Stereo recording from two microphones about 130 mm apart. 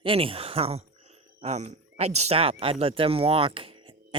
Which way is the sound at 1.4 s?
60° right (ahead or behind).